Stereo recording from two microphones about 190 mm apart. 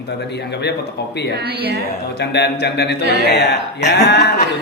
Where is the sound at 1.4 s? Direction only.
55° right (ahead or behind).